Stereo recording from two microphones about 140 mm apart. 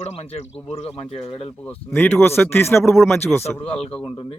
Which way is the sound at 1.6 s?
10° left (ahead or behind).